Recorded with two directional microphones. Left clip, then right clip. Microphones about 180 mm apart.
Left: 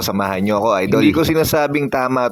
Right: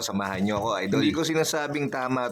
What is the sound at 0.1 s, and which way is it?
Speech, 35° left (ahead or behind).